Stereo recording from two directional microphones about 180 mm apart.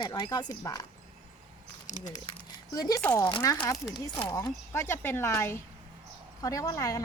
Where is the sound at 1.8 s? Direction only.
40° left (ahead or behind).